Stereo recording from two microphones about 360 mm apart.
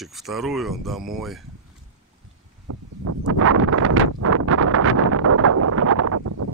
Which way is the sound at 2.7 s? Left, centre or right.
Right.